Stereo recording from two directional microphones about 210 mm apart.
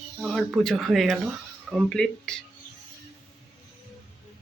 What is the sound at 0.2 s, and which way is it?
Speech, centre (ahead or behind).